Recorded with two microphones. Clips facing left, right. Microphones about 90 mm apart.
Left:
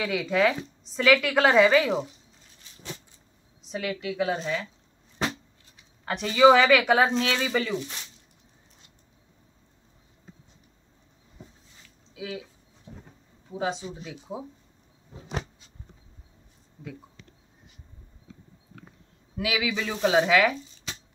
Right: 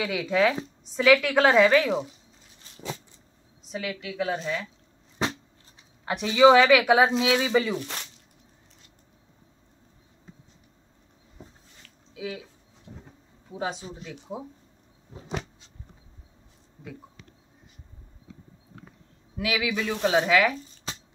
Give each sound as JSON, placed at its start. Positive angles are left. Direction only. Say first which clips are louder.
{"t": 0.0, "sound": "speech", "louder": "even", "side_deg": 0}
{"t": 3.7, "sound": "speech", "louder": "left 2 dB", "side_deg": 0}
{"t": 6.0, "sound": "speech", "louder": "even", "side_deg": -5}
{"t": 11.8, "sound": "a sound", "louder": "right 3 dB", "side_deg": 0}
{"t": 12.9, "sound": "bee", "louder": "even", "side_deg": 15}
{"t": 13.5, "sound": "speech", "louder": "left 2 dB", "side_deg": 0}
{"t": 19.3, "sound": "speech", "louder": "even", "side_deg": 0}